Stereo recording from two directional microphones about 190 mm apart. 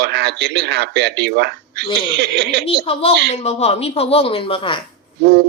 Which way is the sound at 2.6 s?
30° left (ahead or behind).